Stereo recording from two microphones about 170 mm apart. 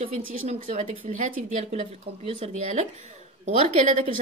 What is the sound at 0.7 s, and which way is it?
Speech, 45° right (ahead or behind).